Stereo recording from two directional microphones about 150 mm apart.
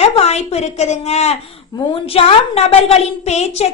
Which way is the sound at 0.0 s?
45° left (ahead or behind).